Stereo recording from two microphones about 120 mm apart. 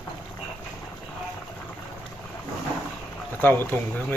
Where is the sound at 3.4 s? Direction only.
15° left (ahead or behind).